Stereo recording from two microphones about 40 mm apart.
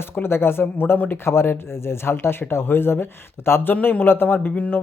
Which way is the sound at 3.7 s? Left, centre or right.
Left.